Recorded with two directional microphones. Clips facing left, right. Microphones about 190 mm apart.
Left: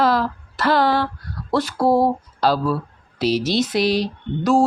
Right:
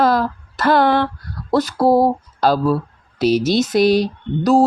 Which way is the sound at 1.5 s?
40° right (ahead or behind).